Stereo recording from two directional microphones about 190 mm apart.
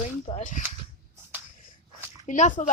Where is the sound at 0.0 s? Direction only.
35° left (ahead or behind).